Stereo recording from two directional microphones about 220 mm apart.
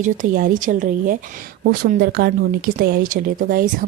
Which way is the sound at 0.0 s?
35° right (ahead or behind).